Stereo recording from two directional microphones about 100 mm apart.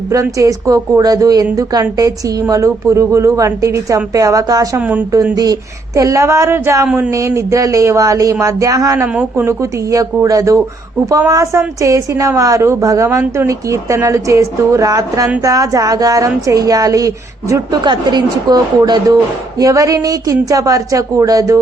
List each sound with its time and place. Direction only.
0.1 s a woman's voice: 35° right (ahead or behind)
4.8 s speech: 15° right (ahead or behind)
5.3 s a woman's voice: 40° right (ahead or behind)
17.8 s a woman's voice: 45° right (ahead or behind)